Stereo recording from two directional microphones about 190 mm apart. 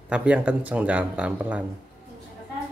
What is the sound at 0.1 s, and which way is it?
Speech, 5° right (ahead or behind).